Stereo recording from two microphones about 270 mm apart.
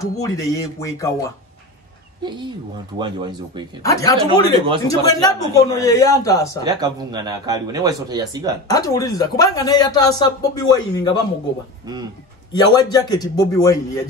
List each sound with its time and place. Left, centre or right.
0.0 s speech: centre
2.2 s speech: centre
3.8 s speech: centre
4.2 s speech: centre
4.8 s speech: centre
6.6 s speech: centre
8.6 s speech: centre
12.5 s speech: centre